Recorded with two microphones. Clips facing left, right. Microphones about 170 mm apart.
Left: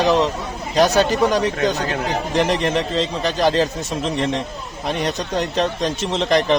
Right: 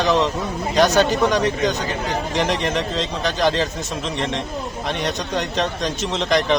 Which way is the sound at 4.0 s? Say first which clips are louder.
Left 4 dB; 40° left (ahead or behind).